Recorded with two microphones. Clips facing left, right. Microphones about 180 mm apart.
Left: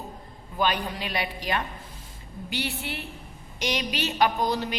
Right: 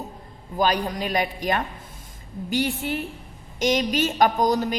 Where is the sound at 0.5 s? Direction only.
40° right (ahead or behind).